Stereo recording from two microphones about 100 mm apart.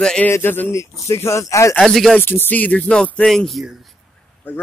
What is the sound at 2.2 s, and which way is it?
Speech, 20° left (ahead or behind).